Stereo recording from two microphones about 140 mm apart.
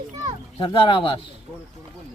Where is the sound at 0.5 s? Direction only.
35° left (ahead or behind).